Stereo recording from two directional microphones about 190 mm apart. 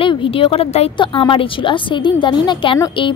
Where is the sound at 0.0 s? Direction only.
25° left (ahead or behind).